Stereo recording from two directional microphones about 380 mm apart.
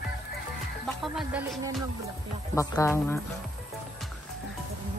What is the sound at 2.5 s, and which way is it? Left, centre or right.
Speech, centre.